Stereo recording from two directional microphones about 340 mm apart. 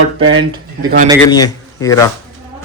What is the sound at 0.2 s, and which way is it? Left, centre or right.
Speech, centre.